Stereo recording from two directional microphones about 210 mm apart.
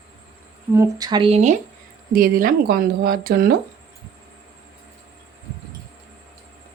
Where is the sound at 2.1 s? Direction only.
45° right (ahead or behind).